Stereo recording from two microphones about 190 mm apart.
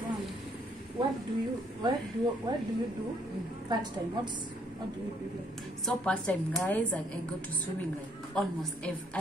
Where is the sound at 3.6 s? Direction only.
25° right (ahead or behind).